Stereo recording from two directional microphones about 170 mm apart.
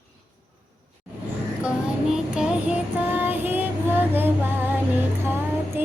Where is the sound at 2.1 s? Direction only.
5° right (ahead or behind).